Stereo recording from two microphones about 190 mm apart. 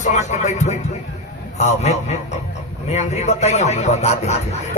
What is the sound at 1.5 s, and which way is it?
A man's voice, 35° left (ahead or behind).